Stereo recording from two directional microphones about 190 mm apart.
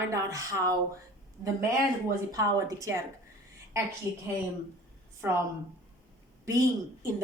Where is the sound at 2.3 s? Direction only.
15° right (ahead or behind).